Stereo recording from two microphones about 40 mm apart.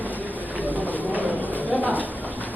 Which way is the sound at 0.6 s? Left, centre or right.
Right.